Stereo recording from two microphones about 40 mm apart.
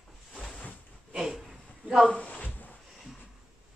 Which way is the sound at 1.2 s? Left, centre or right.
Centre.